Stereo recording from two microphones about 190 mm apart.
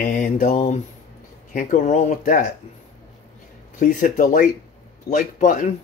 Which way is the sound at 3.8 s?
45° left (ahead or behind).